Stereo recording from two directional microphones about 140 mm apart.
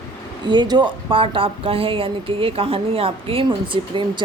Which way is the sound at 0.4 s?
30° right (ahead or behind).